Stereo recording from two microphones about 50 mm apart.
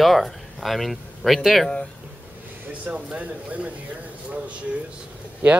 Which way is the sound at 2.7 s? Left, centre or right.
Right.